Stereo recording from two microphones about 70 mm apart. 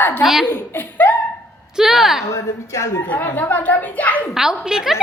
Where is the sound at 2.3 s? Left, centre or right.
Left.